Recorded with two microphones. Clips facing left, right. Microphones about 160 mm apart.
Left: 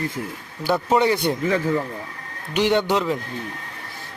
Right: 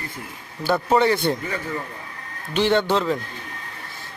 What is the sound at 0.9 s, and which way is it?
Speech, 20° left (ahead or behind).